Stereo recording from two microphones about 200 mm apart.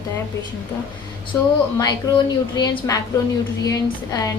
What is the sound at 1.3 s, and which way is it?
A woman's voice, 15° left (ahead or behind).